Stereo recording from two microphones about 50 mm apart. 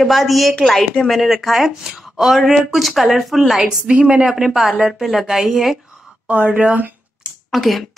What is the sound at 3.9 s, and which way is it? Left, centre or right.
Speech, right.